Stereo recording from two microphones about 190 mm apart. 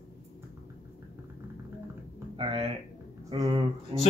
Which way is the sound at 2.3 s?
30° right (ahead or behind).